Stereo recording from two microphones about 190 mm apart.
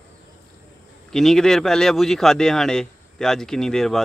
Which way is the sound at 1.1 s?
Centre (ahead or behind).